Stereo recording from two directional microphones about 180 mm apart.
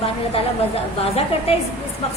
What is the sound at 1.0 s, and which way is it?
Speech, 35° left (ahead or behind).